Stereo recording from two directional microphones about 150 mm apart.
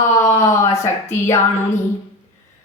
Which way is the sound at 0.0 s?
20° left (ahead or behind).